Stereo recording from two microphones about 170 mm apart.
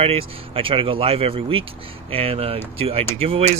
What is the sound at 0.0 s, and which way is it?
Speech, 35° right (ahead or behind).